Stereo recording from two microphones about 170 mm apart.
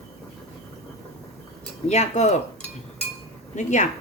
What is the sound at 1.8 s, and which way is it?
Speech, 40° left (ahead or behind).